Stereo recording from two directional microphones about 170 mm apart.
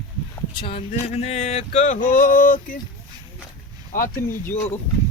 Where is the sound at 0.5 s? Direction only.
30° left (ahead or behind); by 2.8 s 50° left (ahead or behind).